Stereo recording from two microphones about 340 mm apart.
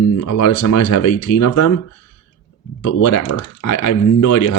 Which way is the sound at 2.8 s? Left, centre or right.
Left.